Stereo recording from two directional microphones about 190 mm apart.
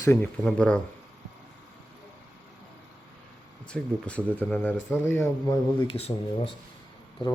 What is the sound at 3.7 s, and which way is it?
Speech, 5° left (ahead or behind).